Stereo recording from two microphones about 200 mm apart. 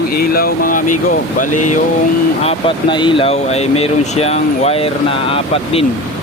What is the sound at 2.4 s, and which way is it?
Speech, 30° left (ahead or behind).